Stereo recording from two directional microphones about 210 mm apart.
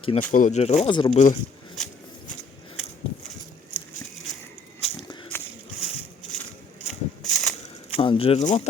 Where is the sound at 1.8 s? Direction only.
Centre (ahead or behind).